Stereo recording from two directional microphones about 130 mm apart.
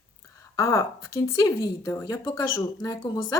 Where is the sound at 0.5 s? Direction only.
25° left (ahead or behind).